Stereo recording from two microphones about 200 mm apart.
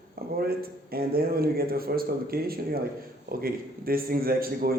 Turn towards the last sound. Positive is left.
turn(degrees=-50)  # may be behind; listen again after turning